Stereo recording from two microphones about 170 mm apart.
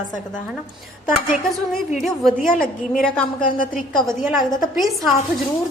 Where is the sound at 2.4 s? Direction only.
55° left (ahead or behind).